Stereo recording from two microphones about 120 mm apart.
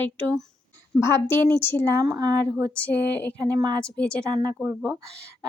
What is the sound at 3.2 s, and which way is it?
Speech, 10° left (ahead or behind).